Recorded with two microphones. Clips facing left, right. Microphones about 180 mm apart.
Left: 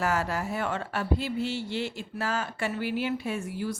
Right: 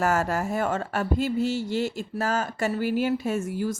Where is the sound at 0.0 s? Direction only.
45° right (ahead or behind).